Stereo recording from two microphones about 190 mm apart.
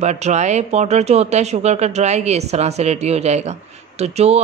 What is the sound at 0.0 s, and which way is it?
A man's voice, 35° right (ahead or behind).